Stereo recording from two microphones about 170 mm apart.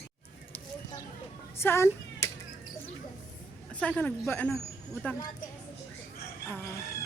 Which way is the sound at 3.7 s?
5° left (ahead or behind).